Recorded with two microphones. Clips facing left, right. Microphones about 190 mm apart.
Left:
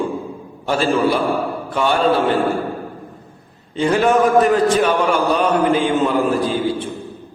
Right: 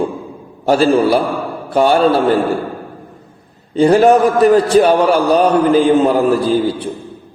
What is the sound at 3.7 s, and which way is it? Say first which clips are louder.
A man's voice: right 6 dB; 40° right (ahead or behind).